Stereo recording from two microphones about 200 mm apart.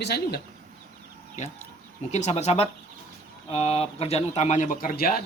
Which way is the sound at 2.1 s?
35° left (ahead or behind).